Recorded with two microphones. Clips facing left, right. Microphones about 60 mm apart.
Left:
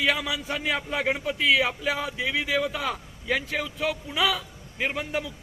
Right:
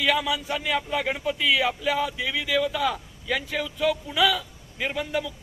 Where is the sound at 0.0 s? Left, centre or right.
Left.